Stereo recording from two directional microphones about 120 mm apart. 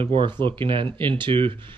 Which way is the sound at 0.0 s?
45° right (ahead or behind).